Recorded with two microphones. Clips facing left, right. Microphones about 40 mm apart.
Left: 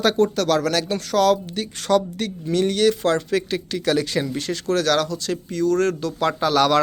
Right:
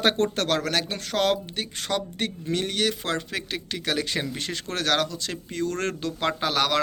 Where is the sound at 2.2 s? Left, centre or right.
Right.